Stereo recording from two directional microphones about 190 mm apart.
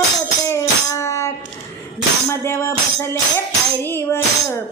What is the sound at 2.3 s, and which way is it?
Tambourine, 15° left (ahead or behind).